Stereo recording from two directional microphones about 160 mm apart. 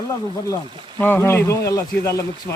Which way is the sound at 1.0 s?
15° left (ahead or behind).